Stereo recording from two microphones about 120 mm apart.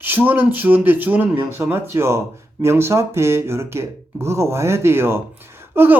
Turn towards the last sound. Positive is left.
turn(degrees=-20)  # may be behind; listen again after turning